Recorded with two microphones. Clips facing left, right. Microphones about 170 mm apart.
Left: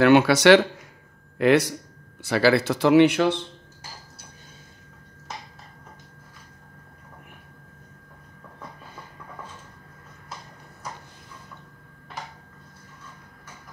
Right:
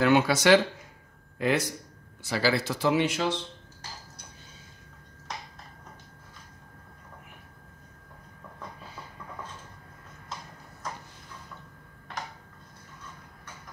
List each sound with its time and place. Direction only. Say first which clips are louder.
0.0 s speech: left 6 dB; 70° left (ahead or behind)